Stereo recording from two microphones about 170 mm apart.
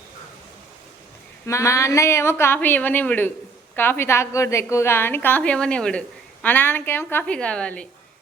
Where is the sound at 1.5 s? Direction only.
15° left (ahead or behind).